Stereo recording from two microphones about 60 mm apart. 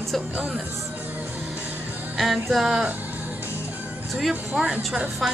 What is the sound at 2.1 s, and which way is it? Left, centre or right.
Music, centre.